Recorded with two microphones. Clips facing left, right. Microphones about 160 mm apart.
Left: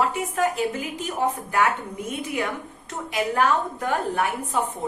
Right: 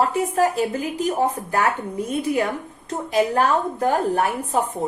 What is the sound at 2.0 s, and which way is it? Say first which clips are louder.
A woman's voice: right 6 dB; 35° right (ahead or behind).